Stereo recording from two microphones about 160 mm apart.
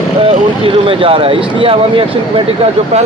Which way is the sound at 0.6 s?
35° right (ahead or behind).